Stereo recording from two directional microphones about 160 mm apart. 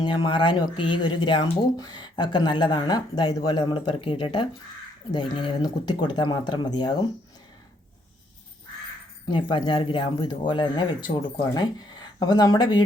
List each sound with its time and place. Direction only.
0.0 s speech: 30° left (ahead or behind)
9.3 s speech: 30° left (ahead or behind)